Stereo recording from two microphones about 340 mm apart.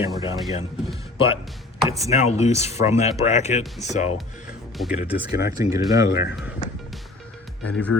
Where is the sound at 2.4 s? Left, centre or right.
Centre.